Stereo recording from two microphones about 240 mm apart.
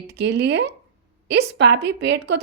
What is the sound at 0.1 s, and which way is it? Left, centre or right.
A woman's voice, right.